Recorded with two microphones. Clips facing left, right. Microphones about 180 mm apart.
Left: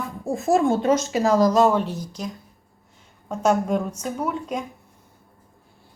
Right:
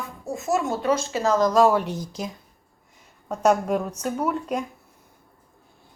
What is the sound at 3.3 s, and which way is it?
Speech, 10° right (ahead or behind).